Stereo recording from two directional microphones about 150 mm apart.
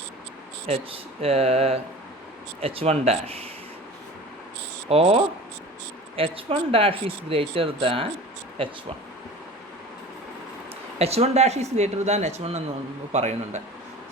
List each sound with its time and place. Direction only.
0.7 s speech: 40° right (ahead or behind)
4.9 s speech: 40° right (ahead or behind)
10.9 s speech: 45° right (ahead or behind)